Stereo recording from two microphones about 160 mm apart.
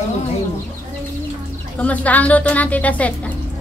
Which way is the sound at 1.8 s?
10° left (ahead or behind).